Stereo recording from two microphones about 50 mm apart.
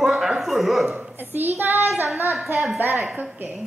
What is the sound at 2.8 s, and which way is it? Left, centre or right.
Speech, right.